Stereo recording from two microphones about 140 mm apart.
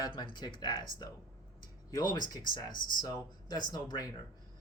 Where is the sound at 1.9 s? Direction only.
30° left (ahead or behind).